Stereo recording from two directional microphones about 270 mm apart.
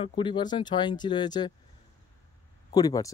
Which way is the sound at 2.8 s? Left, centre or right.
Centre.